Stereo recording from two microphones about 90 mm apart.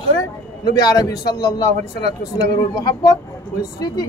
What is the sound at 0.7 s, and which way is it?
Speech, 45° left (ahead or behind).